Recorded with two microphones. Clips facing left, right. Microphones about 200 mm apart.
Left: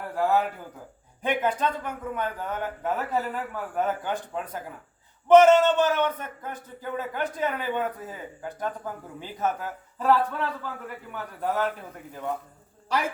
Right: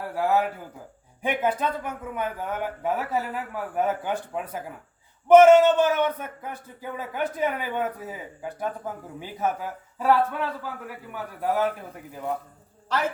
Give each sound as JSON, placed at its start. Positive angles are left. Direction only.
{"t": 0.2, "sound": "a man's voice", "side_deg": -5}
{"t": 12.9, "sound": "a woman's voice", "side_deg": 10}